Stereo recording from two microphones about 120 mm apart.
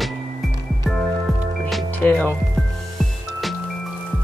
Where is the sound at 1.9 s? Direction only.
15° left (ahead or behind).